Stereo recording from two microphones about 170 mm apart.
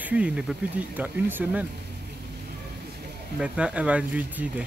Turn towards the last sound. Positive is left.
turn(degrees=-10)  # may be behind; listen again after turning